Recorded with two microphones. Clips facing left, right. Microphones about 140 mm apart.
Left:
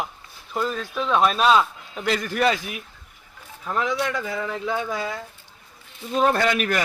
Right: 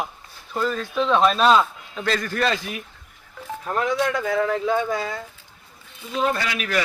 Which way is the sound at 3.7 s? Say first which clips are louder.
Right 2 dB; 50° right (ahead or behind).